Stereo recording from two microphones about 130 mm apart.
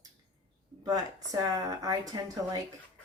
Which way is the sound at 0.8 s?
30° right (ahead or behind).